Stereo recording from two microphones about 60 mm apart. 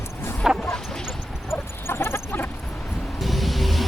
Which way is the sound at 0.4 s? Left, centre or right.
Centre.